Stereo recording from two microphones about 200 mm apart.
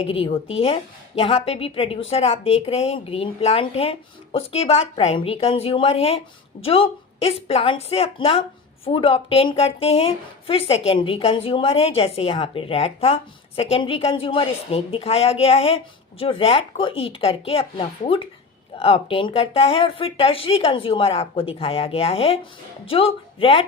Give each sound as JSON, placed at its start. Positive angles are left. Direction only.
{"t": 0.0, "sound": "a woman's voice", "side_deg": 30}